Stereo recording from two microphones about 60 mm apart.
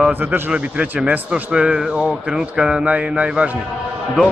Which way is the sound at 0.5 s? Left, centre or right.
Right.